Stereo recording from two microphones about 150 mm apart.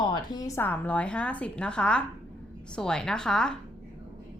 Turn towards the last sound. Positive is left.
turn(degrees=5)  # may be behind; listen again after turning